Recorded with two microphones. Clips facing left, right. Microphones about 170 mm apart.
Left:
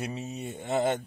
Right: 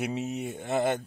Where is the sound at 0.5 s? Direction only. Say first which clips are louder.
Left 1 dB; centre (ahead or behind).